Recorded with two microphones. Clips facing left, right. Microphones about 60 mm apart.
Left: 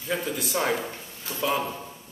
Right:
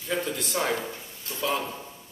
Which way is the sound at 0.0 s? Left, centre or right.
Centre.